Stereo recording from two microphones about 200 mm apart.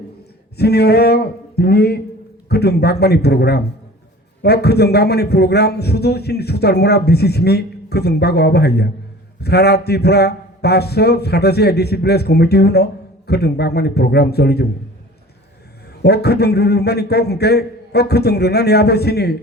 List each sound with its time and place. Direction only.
0.5 s a man's voice: 55° left (ahead or behind)
16.0 s a man's voice: 55° left (ahead or behind)